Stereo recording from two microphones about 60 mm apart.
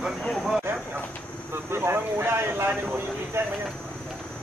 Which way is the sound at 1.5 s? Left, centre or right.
Right.